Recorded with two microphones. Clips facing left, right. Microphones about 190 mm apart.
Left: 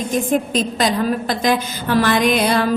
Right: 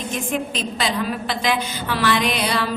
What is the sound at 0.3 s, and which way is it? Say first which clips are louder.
A woman's voice: left 6 dB; 40° left (ahead or behind).